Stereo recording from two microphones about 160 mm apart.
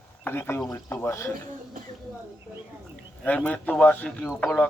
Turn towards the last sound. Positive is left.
turn(degrees=5)  # may be behind; listen again after turning